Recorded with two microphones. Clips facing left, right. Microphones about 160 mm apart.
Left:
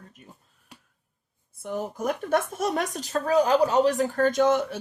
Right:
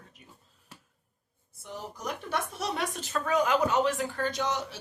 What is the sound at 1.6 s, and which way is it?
Speech, 50° left (ahead or behind).